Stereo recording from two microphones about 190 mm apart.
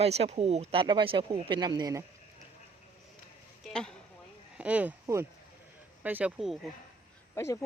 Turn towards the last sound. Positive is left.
turn(degrees=15)  # may be behind; listen again after turning